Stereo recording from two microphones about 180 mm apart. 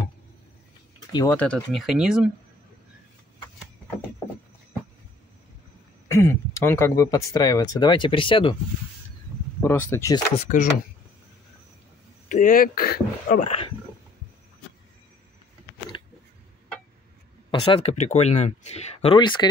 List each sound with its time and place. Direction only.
1.3 s speech: 5° left (ahead or behind)
6.1 s speech: 15° left (ahead or behind)
9.6 s speech: 15° left (ahead or behind)
10.3 s speech: 45° left (ahead or behind)
12.3 s speech: 50° left (ahead or behind)
13.4 s speech: 35° left (ahead or behind)
17.5 s speech: 35° left (ahead or behind)